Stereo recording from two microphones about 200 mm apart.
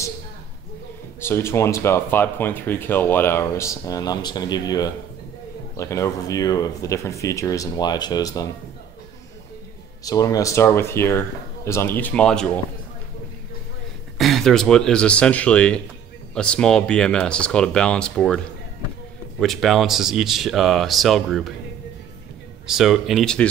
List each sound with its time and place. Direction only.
1.2 s speech: 10° left (ahead or behind)
10.0 s speech: 20° left (ahead or behind)
14.1 s speech: centre (ahead or behind)
19.4 s speech: centre (ahead or behind)
22.7 s speech: centre (ahead or behind)